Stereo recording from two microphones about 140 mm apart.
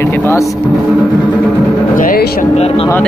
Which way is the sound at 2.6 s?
45° left (ahead or behind).